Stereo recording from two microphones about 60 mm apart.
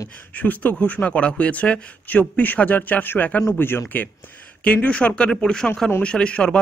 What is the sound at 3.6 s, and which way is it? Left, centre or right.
Speech, left.